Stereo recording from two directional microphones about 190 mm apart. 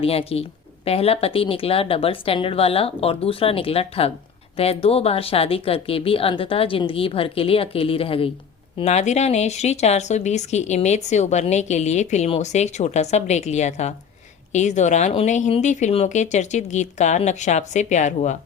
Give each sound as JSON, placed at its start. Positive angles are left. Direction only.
{"t": 0.0, "sound": "speech", "side_deg": 30}